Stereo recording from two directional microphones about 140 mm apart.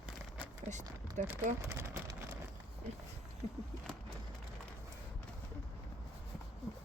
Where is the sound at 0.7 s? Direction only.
60° right (ahead or behind).